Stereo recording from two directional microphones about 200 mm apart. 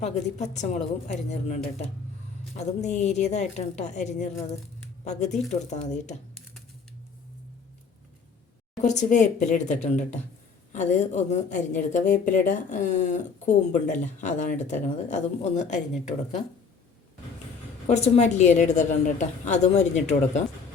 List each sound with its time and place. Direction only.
0.0 s speech: 35° left (ahead or behind)
5.5 s speech: 35° left (ahead or behind)
8.8 s speech: 35° left (ahead or behind)
17.8 s speech: 35° left (ahead or behind)